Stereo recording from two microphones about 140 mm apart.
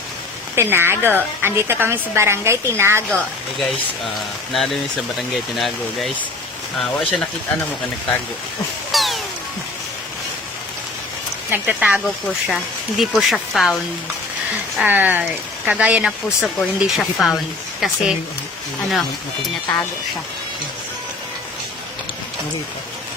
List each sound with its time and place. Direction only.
0.5 s speech: 15° right (ahead or behind)
3.1 s speech: 5° left (ahead or behind)
8.9 s a sound: centre (ahead or behind)
11.5 s speech: 10° right (ahead or behind)
13.0 s speech: centre (ahead or behind)
14.8 s speech: 15° right (ahead or behind)